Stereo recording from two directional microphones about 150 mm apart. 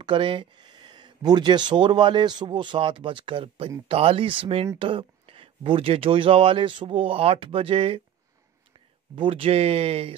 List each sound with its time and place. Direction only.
0.0 s speech: 35° right (ahead or behind)
9.1 s speech: 35° right (ahead or behind)